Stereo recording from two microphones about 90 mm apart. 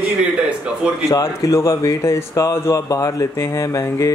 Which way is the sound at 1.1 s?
35° left (ahead or behind).